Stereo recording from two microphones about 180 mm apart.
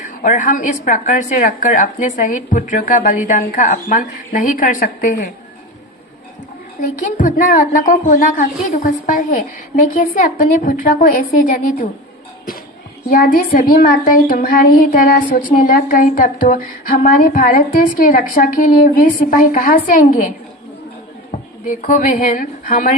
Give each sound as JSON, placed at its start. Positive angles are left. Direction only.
{"t": 0.0, "sound": "a woman's voice", "side_deg": 45}
{"t": 7.0, "sound": "a woman's voice", "side_deg": 45}
{"t": 13.1, "sound": "a woman's voice", "side_deg": 50}
{"t": 21.7, "sound": "a woman's voice", "side_deg": 50}